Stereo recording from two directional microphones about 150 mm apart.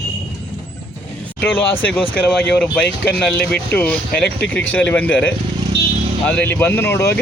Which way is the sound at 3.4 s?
90° left.